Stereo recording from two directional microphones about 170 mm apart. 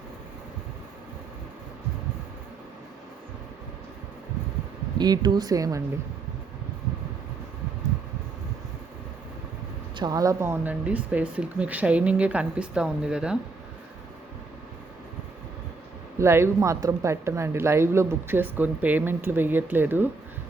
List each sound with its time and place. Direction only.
4.9 s speech: 25° right (ahead or behind)
10.0 s speech: 20° right (ahead or behind); by 13.4 s 5° right (ahead or behind)
16.1 s speech: 15° right (ahead or behind)